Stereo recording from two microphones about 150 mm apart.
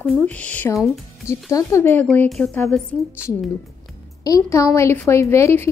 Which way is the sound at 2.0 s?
5° left (ahead or behind).